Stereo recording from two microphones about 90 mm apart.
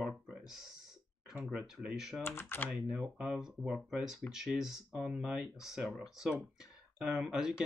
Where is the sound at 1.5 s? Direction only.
10° right (ahead or behind).